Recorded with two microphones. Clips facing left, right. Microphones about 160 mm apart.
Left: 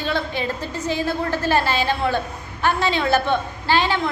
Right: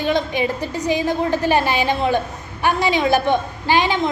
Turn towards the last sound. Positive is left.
turn(degrees=-15)  # may be behind; listen again after turning